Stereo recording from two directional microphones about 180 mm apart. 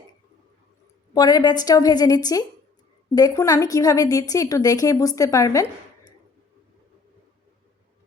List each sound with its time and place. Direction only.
1.1 s speech: 20° left (ahead or behind)